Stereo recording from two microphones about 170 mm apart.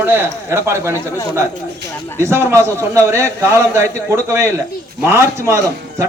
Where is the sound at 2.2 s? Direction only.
15° right (ahead or behind).